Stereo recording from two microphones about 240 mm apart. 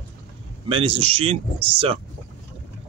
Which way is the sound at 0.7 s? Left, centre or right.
Right.